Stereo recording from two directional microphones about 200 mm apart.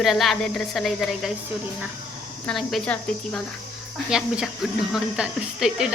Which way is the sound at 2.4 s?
Centre (ahead or behind).